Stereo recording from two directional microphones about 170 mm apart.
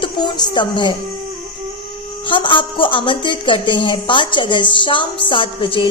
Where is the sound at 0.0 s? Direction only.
25° left (ahead or behind).